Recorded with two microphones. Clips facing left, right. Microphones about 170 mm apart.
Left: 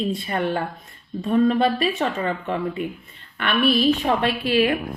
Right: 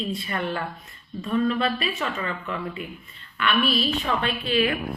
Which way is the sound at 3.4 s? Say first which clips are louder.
Left 4 dB; 55° left (ahead or behind).